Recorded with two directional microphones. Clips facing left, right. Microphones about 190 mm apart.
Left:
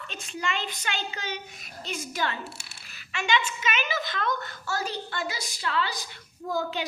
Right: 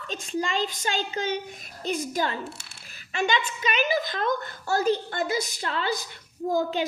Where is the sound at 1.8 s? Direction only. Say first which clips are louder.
Right 6 dB; 55° right (ahead or behind).